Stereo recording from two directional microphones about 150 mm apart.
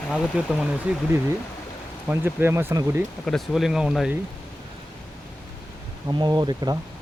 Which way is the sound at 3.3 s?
Centre (ahead or behind).